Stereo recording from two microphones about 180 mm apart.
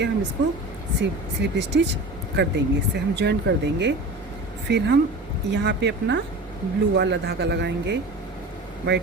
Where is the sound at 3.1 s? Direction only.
70° right (ahead or behind).